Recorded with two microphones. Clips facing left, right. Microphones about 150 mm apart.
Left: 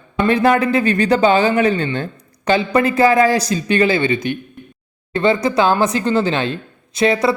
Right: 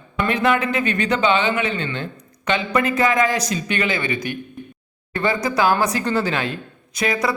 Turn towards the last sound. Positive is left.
turn(degrees=25)  # may be behind; listen again after turning